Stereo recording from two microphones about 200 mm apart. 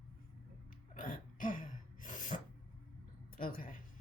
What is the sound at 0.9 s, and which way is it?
Dog, 45° left (ahead or behind).